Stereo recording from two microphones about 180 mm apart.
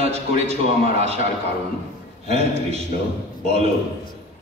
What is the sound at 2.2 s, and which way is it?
A man's voice, 35° right (ahead or behind).